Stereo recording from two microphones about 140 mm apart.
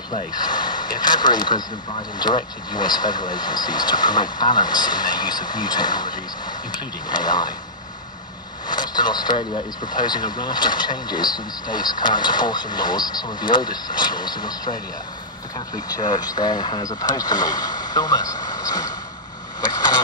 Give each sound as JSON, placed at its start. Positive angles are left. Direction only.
{"t": 0.3, "sound": "speech", "side_deg": 30}
{"t": 8.6, "sound": "speech", "side_deg": 30}
{"t": 15.9, "sound": "speech", "side_deg": 30}